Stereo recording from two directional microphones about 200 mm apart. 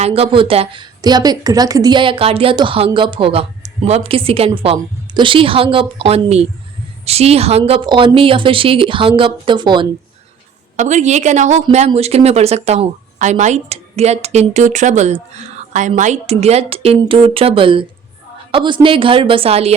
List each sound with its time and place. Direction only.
0.0 s a woman's voice: 30° right (ahead or behind)
10.8 s a woman's voice: 35° right (ahead or behind)